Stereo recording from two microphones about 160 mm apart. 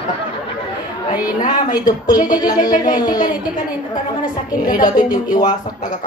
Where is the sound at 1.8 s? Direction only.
25° left (ahead or behind).